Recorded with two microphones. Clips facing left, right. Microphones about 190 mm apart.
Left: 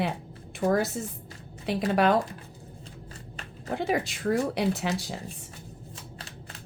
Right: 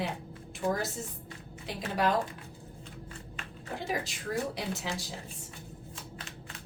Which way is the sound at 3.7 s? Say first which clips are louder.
Left 7 dB; 65° left (ahead or behind).